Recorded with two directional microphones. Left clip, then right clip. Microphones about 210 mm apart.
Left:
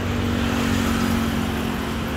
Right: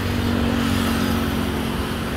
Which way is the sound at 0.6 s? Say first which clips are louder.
Right 1 dB; 45° left (ahead or behind).